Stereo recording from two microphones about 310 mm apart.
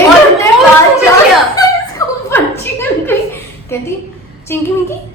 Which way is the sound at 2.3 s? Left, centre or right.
Centre.